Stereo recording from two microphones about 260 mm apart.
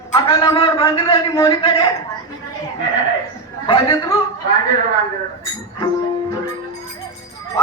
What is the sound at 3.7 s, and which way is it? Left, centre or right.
Speech, centre.